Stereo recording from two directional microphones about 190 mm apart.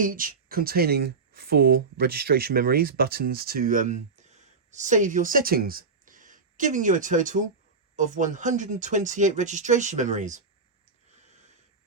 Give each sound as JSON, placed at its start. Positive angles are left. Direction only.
{"t": 0.0, "sound": "speech", "side_deg": -45}
{"t": 11.1, "sound": "wheeze", "side_deg": -35}